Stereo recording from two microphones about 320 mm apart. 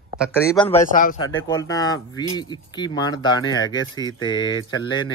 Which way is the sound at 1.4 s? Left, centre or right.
Centre.